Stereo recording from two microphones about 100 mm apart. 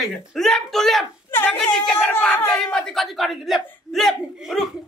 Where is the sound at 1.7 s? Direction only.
5° left (ahead or behind).